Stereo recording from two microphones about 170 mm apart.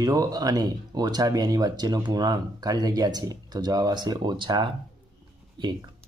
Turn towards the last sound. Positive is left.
turn(degrees=-25)  # may be behind; listen again after turning